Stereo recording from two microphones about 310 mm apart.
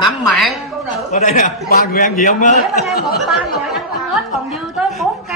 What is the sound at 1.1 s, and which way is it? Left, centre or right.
A man's voice, left.